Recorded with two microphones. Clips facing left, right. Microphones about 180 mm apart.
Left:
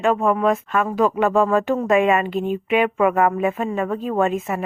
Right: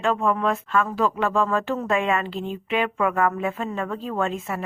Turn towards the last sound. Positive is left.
turn(degrees=15)  # may be behind; listen again after turning